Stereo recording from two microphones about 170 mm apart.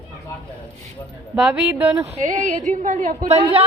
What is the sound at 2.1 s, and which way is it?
A woman's voice, 45° right (ahead or behind).